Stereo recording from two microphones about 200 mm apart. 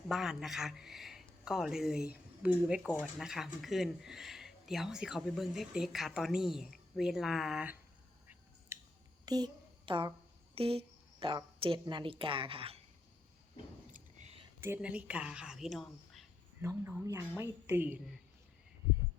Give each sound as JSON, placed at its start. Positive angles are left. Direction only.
{"t": 0.1, "sound": "speech", "side_deg": 0}
{"t": 8.7, "sound": "finger snapping", "side_deg": -10}
{"t": 9.2, "sound": "a sound", "side_deg": -20}
{"t": 10.5, "sound": "a woman's voice", "side_deg": -30}
{"t": 13.9, "sound": "whispering", "side_deg": -35}
{"t": 14.6, "sound": "speech", "side_deg": -10}
{"t": 16.6, "sound": "a woman's voice", "side_deg": -10}